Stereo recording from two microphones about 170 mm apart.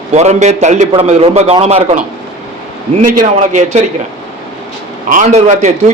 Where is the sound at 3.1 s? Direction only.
50° right (ahead or behind).